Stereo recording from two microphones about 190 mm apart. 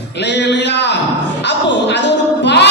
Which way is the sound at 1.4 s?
65° left (ahead or behind).